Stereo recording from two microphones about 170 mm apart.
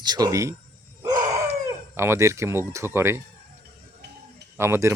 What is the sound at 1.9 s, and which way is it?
Speech, 15° right (ahead or behind).